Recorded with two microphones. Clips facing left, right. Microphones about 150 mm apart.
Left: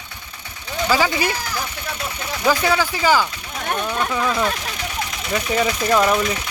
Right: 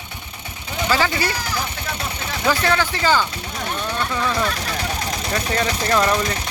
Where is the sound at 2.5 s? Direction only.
10° left (ahead or behind).